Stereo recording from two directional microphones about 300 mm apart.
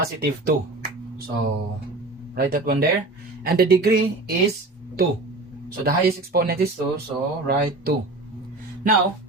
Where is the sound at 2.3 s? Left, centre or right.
Right.